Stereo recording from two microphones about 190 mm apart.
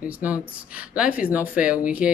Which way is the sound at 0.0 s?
10° right (ahead or behind).